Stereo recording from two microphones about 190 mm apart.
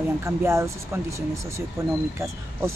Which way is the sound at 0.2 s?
15° right (ahead or behind).